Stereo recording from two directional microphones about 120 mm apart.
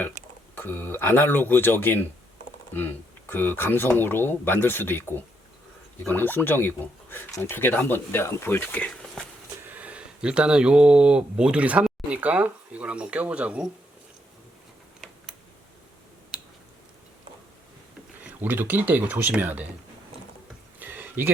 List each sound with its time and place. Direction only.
0.5 s speech: 15° left (ahead or behind)
7.3 s speech: 30° left (ahead or behind)
7.5 s speech: 15° left (ahead or behind)
9.6 s speech: 10° right (ahead or behind)
16.3 s a sound: 5° right (ahead or behind)
18.2 s speech: 15° right (ahead or behind)
20.7 s a sound: 15° right (ahead or behind)